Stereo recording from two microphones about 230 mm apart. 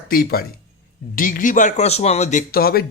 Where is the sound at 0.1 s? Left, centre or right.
Left.